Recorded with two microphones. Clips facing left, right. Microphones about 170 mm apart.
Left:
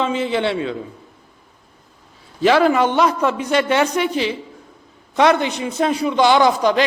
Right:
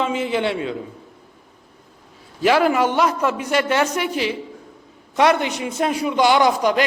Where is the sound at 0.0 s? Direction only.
10° right (ahead or behind).